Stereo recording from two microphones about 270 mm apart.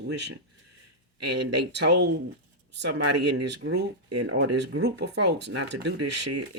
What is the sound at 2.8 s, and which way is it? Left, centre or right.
Speech, right.